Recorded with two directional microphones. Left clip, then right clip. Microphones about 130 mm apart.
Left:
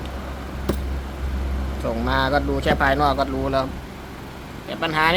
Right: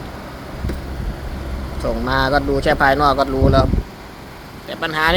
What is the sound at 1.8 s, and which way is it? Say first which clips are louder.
Speech: right 3 dB; 25° right (ahead or behind).